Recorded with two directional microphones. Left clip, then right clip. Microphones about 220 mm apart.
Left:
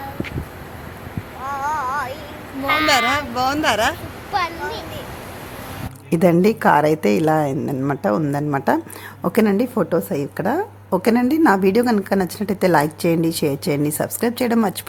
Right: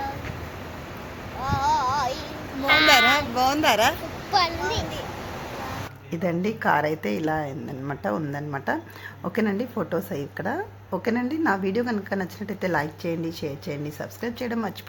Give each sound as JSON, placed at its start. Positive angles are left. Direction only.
{"t": 1.5, "sound": "child singing", "side_deg": -15}
{"t": 2.6, "sound": "speech", "side_deg": -5}
{"t": 3.3, "sound": "speech", "side_deg": 10}
{"t": 4.3, "sound": "a child's voice", "side_deg": -5}
{"t": 6.1, "sound": "a woman's voice", "side_deg": 45}